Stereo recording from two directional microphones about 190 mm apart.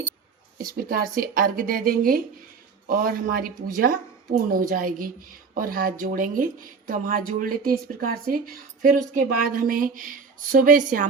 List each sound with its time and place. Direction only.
0.6 s a woman's voice: 50° right (ahead or behind)